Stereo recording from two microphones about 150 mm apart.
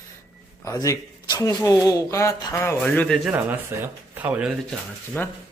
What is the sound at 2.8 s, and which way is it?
Speech, 5° left (ahead or behind).